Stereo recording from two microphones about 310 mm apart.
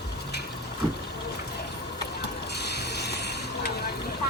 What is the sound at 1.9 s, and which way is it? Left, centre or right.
Mechanisms, left.